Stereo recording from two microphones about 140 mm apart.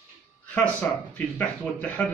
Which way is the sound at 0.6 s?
10° left (ahead or behind).